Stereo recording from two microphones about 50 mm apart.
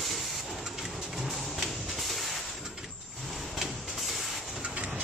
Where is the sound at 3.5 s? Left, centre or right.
Centre.